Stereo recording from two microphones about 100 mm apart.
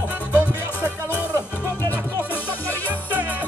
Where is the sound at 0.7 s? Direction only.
20° left (ahead or behind).